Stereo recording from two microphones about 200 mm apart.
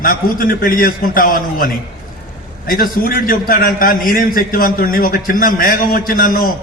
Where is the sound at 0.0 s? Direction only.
45° left (ahead or behind).